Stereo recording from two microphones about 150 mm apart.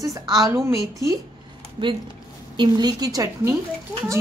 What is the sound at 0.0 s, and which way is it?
A woman's voice, 25° right (ahead or behind).